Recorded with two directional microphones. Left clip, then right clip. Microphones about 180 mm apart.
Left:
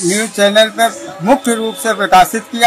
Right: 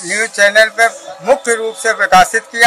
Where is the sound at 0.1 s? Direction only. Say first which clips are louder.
Right 2 dB; 15° right (ahead or behind).